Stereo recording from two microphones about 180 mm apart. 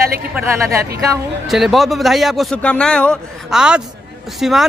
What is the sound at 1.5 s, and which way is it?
Speech, centre (ahead or behind).